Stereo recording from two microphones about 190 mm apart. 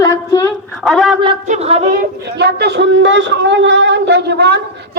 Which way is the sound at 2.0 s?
60° right (ahead or behind).